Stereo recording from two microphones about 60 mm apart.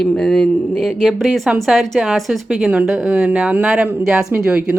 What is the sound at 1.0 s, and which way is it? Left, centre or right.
A woman's voice, centre.